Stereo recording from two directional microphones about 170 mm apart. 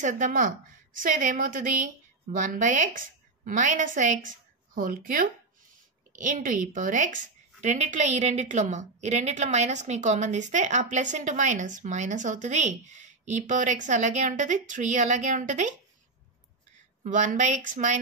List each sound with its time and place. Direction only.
0.0 s a woman's voice: 50° right (ahead or behind)
17.0 s a woman's voice: 50° right (ahead or behind)